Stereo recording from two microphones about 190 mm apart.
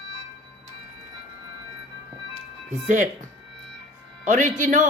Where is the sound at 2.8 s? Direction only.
40° right (ahead or behind).